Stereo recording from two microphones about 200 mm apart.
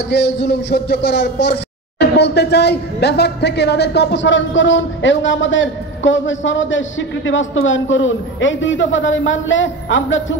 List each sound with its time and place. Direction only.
0.1 s speech: 60° left (ahead or behind)